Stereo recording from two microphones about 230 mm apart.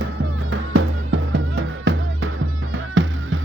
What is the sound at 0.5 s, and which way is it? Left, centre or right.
Music, right.